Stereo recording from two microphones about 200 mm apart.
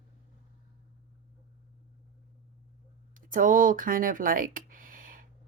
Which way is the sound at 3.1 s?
40° right (ahead or behind).